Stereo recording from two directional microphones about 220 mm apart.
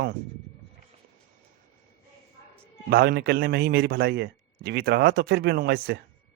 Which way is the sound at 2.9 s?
45° right (ahead or behind).